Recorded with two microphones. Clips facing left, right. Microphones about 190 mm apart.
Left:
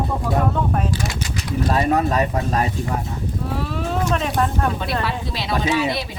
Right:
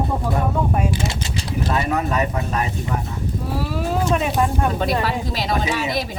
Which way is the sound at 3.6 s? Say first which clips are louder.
Right 3 dB; 5° right (ahead or behind).